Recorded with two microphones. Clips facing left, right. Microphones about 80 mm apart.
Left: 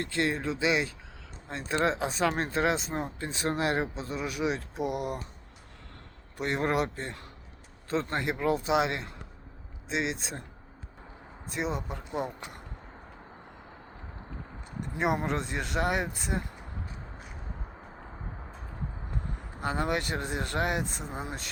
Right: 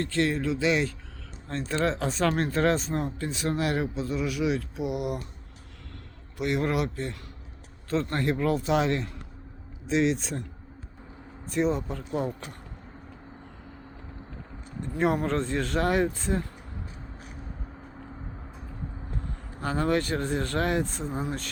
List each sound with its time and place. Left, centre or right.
0.0 s speech: left
4.8 s speech: left
6.3 s a man's voice: left; by 9.0 s centre
11.5 s speech: centre
14.8 s speech: centre
19.5 s speech: centre